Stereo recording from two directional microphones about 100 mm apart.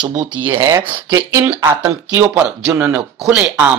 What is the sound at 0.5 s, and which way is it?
Speech, 30° right (ahead or behind).